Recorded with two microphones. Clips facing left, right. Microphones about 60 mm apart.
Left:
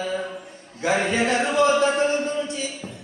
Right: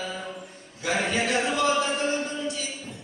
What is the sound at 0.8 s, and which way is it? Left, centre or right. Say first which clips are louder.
Chant: left 4 dB; left.